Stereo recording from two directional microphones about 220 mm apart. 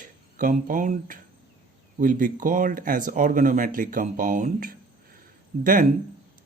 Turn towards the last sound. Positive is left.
turn(degrees=-40)  # may be behind; listen again after turning